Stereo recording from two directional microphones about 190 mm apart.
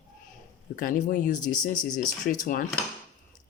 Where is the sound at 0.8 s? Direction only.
45° left (ahead or behind).